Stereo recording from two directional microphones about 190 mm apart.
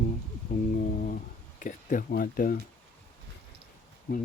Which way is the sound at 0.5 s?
45° left (ahead or behind).